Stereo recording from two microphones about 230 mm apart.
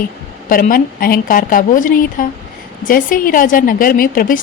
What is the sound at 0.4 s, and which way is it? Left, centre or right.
Speech, left.